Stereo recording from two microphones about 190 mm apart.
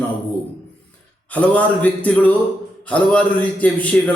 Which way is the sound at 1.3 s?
5° left (ahead or behind).